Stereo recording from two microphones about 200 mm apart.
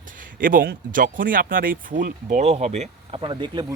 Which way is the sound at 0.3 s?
45° right (ahead or behind).